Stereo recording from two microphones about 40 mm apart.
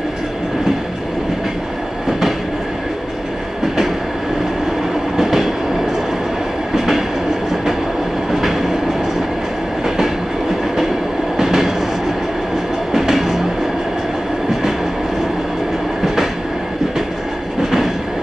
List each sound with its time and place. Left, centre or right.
5.1 s train: centre
8.3 s train: centre
11.3 s train: centre
12.9 s train: centre
17.6 s train: centre